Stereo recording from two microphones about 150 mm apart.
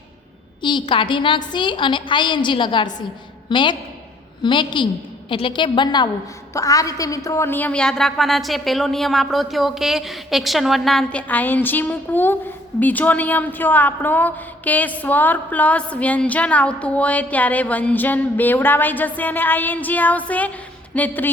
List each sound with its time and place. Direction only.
0.6 s a woman's voice: 35° left (ahead or behind); by 21.2 s 10° left (ahead or behind)